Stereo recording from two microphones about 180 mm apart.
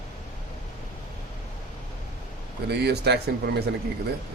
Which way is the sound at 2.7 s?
65° right (ahead or behind).